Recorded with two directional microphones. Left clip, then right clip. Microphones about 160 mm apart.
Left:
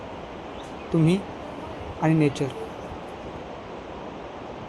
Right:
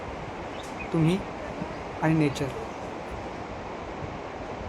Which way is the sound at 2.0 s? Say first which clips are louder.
Left 3 dB; 20° left (ahead or behind).